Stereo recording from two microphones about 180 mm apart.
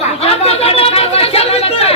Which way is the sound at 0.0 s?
35° left (ahead or behind).